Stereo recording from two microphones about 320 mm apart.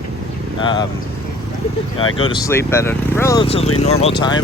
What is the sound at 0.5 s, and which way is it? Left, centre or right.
Speech, centre.